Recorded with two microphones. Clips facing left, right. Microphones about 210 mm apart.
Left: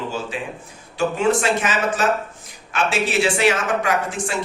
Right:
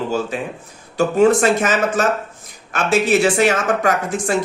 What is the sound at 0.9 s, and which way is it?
A man's voice, 40° right (ahead or behind).